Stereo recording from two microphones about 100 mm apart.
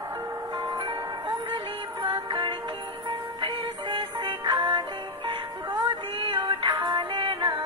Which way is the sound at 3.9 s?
50° right (ahead or behind).